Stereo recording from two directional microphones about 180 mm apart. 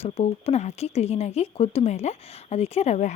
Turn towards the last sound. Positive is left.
turn(degrees=35)  # may be behind; listen again after turning